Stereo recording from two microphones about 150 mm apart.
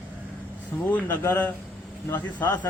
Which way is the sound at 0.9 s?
15° left (ahead or behind).